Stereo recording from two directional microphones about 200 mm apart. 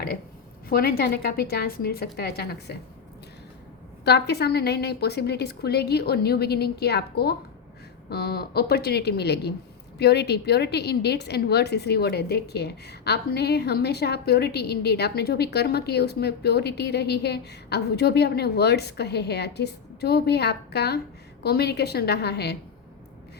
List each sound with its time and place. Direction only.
0.7 s a woman's voice: 50° left (ahead or behind)
4.0 s a woman's voice: 55° left (ahead or behind)